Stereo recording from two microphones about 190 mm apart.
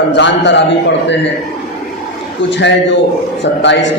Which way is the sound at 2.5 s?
70° left (ahead or behind).